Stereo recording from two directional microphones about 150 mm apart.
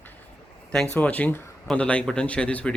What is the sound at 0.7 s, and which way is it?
Speech, 5° left (ahead or behind).